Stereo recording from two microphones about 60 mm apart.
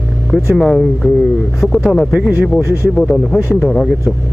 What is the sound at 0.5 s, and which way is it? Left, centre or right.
Speech, centre.